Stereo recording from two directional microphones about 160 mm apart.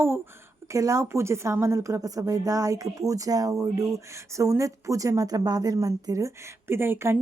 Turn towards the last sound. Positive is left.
turn(degrees=-15)  # may be behind; listen again after turning